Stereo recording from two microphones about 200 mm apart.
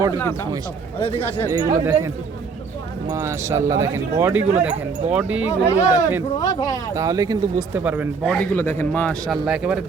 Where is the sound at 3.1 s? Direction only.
15° right (ahead or behind).